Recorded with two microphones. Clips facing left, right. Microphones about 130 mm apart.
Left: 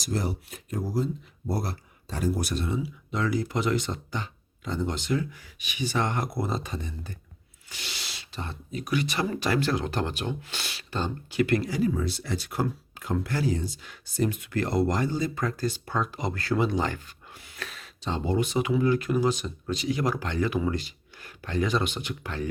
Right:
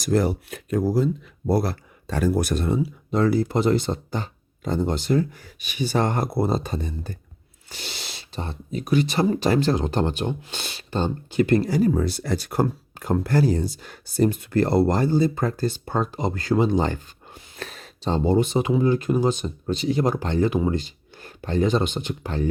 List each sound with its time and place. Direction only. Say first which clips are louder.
0.0 s speech: right 9 dB; 60° right (ahead or behind); by 7.2 s 35° right (ahead or behind)
7.7 s owl: right 4 dB; 30° right (ahead or behind)
8.4 s speech: right 5 dB; 30° right (ahead or behind)